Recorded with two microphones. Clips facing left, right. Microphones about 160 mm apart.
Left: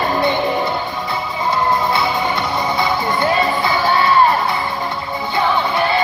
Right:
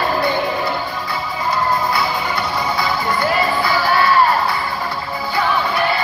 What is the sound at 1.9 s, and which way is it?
Music, 25° left (ahead or behind).